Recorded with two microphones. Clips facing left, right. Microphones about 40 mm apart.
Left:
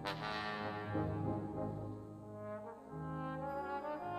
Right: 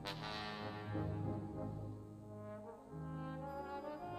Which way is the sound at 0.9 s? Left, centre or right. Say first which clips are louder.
Left 4 dB; centre.